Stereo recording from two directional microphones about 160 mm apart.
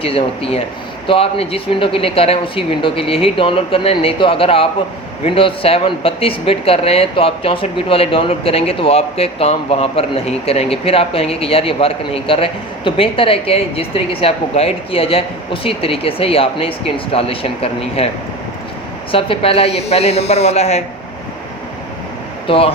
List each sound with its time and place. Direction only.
0.0 s speech: 35° left (ahead or behind)
19.1 s speech: 35° left (ahead or behind)
22.4 s speech: 35° left (ahead or behind)